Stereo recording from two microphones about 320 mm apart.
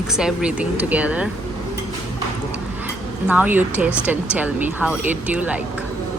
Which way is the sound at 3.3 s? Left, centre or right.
Centre.